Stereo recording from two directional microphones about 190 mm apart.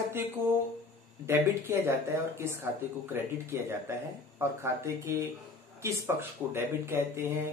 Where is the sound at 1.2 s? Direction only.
15° right (ahead or behind).